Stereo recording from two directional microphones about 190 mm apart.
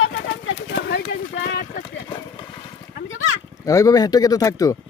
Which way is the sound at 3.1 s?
90° left.